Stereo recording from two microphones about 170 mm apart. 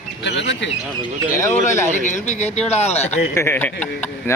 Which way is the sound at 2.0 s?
45° left (ahead or behind).